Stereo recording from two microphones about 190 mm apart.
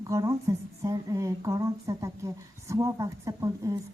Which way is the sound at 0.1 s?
15° right (ahead or behind).